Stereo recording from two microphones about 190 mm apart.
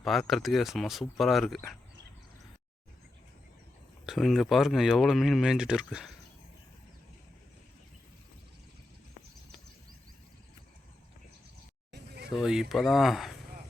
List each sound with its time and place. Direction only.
0.0 s speech: centre (ahead or behind)
4.0 s speech: centre (ahead or behind)
11.9 s a sound: 60° right (ahead or behind)
12.4 s speech: 5° right (ahead or behind)